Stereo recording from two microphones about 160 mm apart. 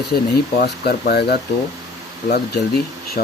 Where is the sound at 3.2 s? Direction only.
70° left (ahead or behind).